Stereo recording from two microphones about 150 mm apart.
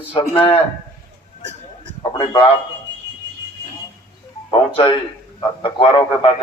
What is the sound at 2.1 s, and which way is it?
Speech, 30° left (ahead or behind).